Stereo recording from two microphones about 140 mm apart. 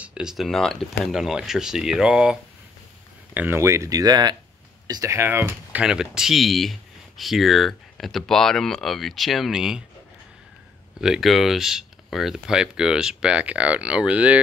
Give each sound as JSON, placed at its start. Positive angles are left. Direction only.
{"t": 0.0, "sound": "speech", "side_deg": -5}
{"t": 3.3, "sound": "speech", "side_deg": -15}
{"t": 11.0, "sound": "speech", "side_deg": 0}